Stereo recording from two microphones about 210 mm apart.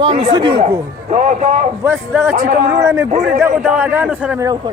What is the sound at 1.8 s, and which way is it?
A man's voice, 10° right (ahead or behind).